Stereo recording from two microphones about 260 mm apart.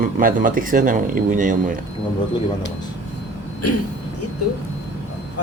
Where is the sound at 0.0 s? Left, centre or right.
Right.